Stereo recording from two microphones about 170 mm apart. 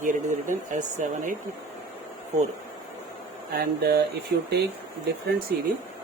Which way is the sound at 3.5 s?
65° right (ahead or behind).